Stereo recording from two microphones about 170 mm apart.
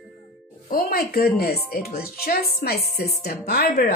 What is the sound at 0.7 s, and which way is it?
Speech, 65° left (ahead or behind).